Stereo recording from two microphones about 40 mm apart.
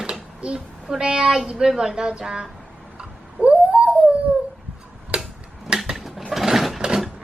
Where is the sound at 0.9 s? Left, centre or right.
Centre.